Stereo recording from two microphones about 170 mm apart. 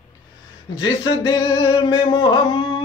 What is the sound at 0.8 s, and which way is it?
Singing, 30° left (ahead or behind).